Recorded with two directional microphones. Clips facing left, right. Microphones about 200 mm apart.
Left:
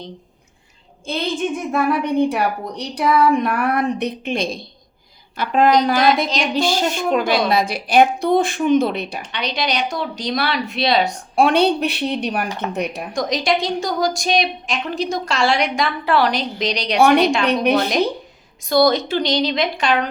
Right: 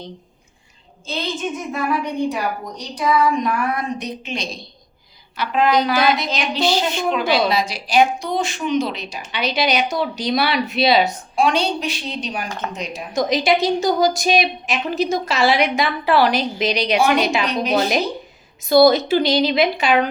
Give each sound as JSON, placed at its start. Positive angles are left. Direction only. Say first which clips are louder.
{"t": 1.0, "sound": "a woman's voice", "louder": "left 3 dB", "side_deg": 60}
{"t": 9.2, "sound": "a woman's voice", "louder": "right 7 dB", "side_deg": -5}
{"t": 11.3, "sound": "a woman's voice", "louder": "left 4 dB", "side_deg": 60}
{"t": 13.1, "sound": "a woman's voice", "louder": "right 3 dB", "side_deg": -5}
{"t": 17.4, "sound": "a woman's voice", "louder": "left 3 dB", "side_deg": 60}
{"t": 18.6, "sound": "a woman's voice", "louder": "right 3 dB", "side_deg": -5}